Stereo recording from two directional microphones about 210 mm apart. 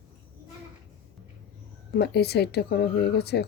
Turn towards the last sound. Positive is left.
turn(degrees=50)  # may be behind; listen again after turning